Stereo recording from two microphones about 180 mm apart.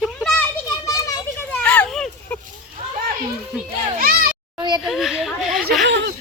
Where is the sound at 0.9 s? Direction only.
20° left (ahead or behind).